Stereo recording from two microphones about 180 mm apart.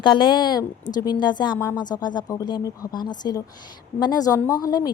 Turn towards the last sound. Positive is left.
turn(degrees=20)  # may be behind; listen again after turning